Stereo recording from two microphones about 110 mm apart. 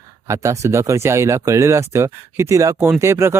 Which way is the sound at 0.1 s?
30° right (ahead or behind).